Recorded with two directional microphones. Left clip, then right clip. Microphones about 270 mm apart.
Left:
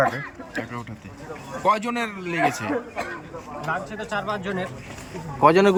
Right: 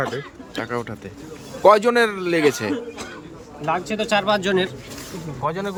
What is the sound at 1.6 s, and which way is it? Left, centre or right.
A man's voice, centre.